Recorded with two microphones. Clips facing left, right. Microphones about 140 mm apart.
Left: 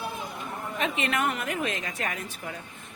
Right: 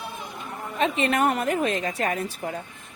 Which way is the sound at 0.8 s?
35° right (ahead or behind).